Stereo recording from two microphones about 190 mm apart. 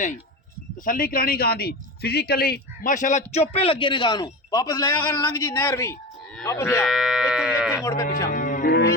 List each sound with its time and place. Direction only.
0.9 s a man's voice: 45° left (ahead or behind); by 6.8 s 15° left (ahead or behind)
6.8 s livestock: centre (ahead or behind)
7.8 s speech: 15° left (ahead or behind)
8.3 s cattle: 45° left (ahead or behind)